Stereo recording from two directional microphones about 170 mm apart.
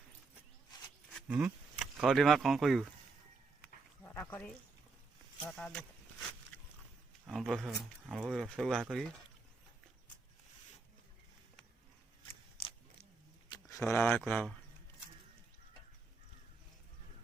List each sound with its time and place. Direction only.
1.3 s speech: 10° right (ahead or behind)
4.0 s dog: 10° left (ahead or behind)
5.5 s a sound: centre (ahead or behind)
7.3 s speech: centre (ahead or behind)
13.5 s a sound: 20° left (ahead or behind)
13.8 s speech: 10° left (ahead or behind)